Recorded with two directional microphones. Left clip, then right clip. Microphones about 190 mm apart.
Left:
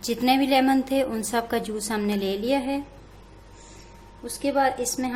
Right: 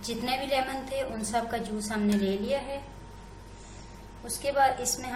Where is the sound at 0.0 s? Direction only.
55° left (ahead or behind).